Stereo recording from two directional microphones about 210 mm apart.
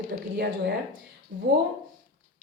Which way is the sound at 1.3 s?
40° right (ahead or behind).